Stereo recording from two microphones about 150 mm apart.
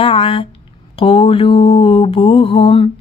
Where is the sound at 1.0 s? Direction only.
40° left (ahead or behind).